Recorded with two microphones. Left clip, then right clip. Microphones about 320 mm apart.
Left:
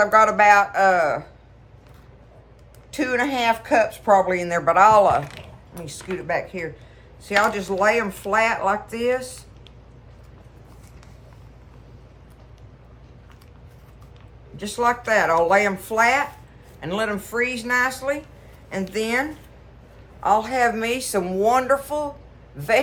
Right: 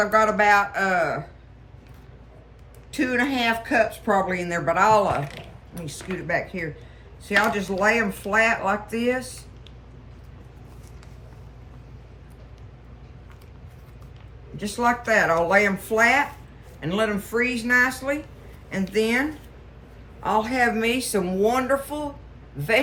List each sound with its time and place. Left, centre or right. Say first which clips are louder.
0.0 s a man's voice: left 4 dB; centre
2.9 s a woman's voice: left 1 dB; centre
14.6 s a woman's voice: left 1 dB; centre
20.2 s a woman's voice: left 3 dB; centre